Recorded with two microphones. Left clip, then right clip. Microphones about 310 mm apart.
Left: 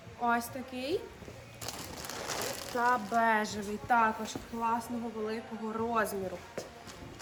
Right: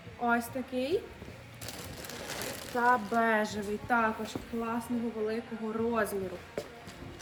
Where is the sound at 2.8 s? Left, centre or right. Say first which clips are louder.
Right 2 dB; centre.